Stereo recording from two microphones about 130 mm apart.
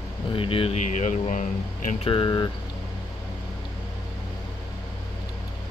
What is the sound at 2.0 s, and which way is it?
Speech, 35° left (ahead or behind).